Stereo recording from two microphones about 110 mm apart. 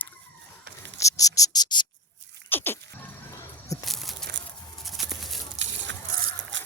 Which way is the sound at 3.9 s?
Centre (ahead or behind).